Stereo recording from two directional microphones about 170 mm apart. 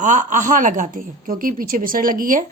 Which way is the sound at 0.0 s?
45° right (ahead or behind).